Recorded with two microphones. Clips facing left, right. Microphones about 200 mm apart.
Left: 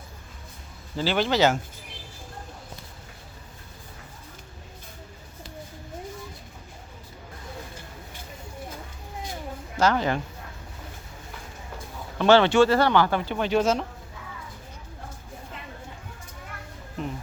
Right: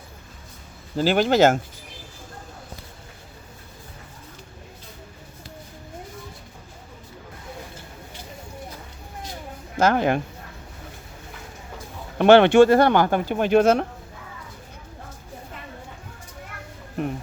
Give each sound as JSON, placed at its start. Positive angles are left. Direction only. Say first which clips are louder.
{"t": 0.9, "sound": "speech", "louder": "right 5 dB", "side_deg": -45}
{"t": 9.7, "sound": "speech", "louder": "right 3 dB", "side_deg": -55}
{"t": 12.1, "sound": "speech", "louder": "right 5 dB", "side_deg": -55}